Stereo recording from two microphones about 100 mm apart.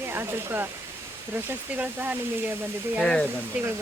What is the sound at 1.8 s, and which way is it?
Speech, 15° right (ahead or behind).